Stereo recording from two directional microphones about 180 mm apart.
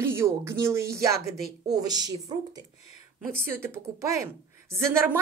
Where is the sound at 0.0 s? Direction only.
15° right (ahead or behind).